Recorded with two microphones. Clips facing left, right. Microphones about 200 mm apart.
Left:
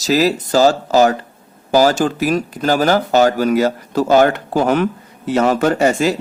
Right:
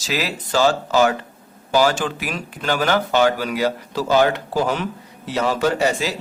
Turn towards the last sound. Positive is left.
turn(degrees=50)  # may be behind; listen again after turning